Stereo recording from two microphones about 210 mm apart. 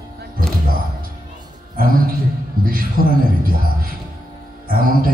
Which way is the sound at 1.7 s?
45° right (ahead or behind).